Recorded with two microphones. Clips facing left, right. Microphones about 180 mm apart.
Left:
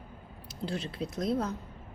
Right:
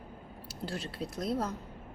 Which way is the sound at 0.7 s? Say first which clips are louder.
Left 3 dB; 5° right (ahead or behind).